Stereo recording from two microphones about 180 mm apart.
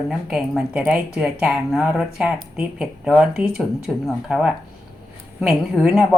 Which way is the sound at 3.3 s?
55° right (ahead or behind).